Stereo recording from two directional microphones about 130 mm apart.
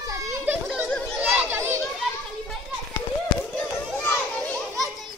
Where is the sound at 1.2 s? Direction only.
15° right (ahead or behind).